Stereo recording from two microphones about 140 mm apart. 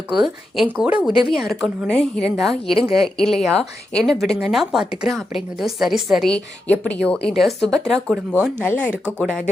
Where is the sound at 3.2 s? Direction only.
Centre (ahead or behind).